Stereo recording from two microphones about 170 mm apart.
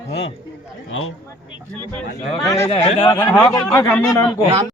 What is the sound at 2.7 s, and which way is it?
Speech, 35° left (ahead or behind).